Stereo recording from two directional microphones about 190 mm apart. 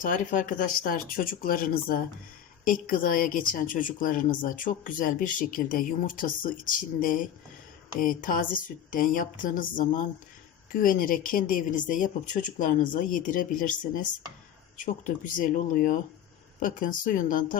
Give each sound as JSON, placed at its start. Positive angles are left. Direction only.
{"t": 0.0, "sound": "speech", "side_deg": 45}